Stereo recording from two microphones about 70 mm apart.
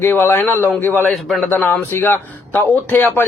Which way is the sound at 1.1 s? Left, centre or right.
Centre.